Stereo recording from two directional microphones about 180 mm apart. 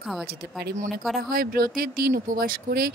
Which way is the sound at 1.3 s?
55° right (ahead or behind).